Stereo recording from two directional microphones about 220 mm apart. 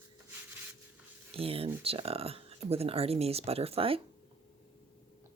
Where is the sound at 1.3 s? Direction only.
25° right (ahead or behind).